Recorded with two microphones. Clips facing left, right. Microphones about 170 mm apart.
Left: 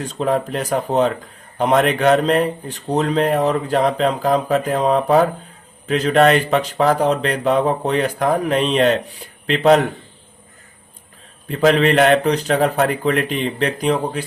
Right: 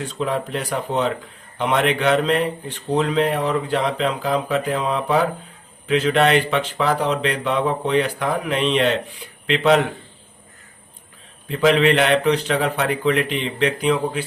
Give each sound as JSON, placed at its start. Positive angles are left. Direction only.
{"t": 0.0, "sound": "a man's voice", "side_deg": 40}
{"t": 11.4, "sound": "a man's voice", "side_deg": 40}